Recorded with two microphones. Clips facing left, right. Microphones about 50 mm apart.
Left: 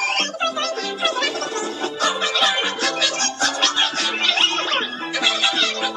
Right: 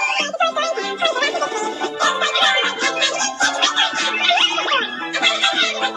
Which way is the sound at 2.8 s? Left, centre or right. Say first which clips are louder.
Right 2 dB; centre.